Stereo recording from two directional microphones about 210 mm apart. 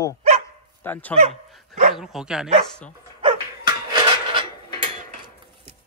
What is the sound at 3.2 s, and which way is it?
Dog, 20° right (ahead or behind).